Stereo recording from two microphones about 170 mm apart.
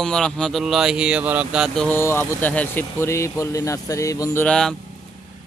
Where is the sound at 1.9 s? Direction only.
15° left (ahead or behind).